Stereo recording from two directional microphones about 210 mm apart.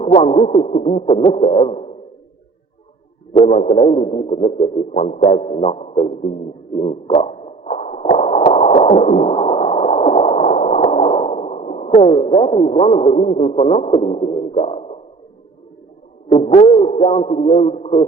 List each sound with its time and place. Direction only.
0.0 s speech: 30° left (ahead or behind)
0.4 s music: 30° left (ahead or behind)
3.3 s music: 30° left (ahead or behind)
6.7 s a sound: 30° left (ahead or behind)
16.3 s music: 30° left (ahead or behind)